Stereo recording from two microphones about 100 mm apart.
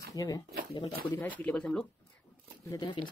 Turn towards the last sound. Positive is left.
turn(degrees=55)  # may be behind; listen again after turning